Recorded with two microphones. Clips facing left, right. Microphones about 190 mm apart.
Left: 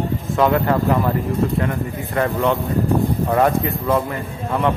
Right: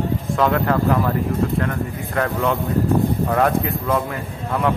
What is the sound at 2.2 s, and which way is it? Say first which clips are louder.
A man's voice: left 2 dB; centre (ahead or behind).